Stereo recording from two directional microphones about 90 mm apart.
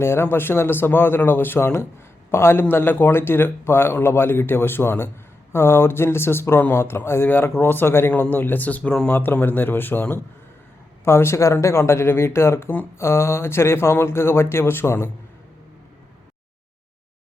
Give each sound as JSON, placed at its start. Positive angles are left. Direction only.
{"t": 0.0, "sound": "speech", "side_deg": 25}